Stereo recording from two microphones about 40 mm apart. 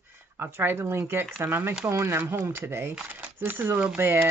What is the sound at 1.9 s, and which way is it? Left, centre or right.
Speech, right.